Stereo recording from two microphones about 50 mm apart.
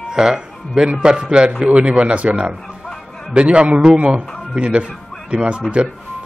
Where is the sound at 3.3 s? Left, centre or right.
Right.